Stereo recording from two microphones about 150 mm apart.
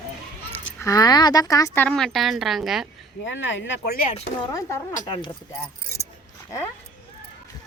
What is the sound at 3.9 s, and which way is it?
Speech, 70° left (ahead or behind).